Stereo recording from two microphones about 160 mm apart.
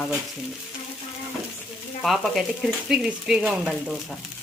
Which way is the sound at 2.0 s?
Centre (ahead or behind).